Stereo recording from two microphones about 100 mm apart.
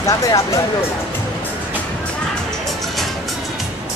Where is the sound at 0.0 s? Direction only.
35° left (ahead or behind).